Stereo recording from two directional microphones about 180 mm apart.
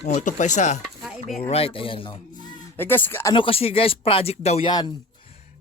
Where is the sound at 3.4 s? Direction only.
30° left (ahead or behind).